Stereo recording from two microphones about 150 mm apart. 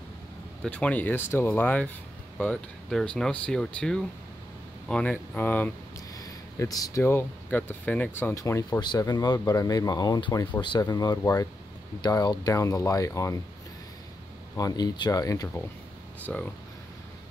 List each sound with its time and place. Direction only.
0.7 s speech: 10° left (ahead or behind)
6.1 s speech: 25° left (ahead or behind)
14.6 s speech: 25° left (ahead or behind)
16.3 s speech: 5° left (ahead or behind)